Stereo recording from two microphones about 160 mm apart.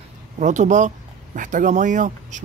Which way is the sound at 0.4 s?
50° right (ahead or behind).